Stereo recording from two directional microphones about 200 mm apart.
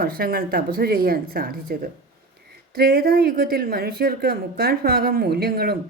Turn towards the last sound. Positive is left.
turn(degrees=-50)  # may be behind; listen again after turning